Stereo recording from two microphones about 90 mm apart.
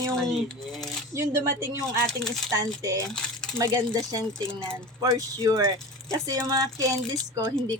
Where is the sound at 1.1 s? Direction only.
30° right (ahead or behind).